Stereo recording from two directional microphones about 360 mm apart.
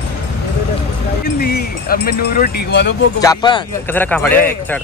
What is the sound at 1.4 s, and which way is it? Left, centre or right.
Speech, left.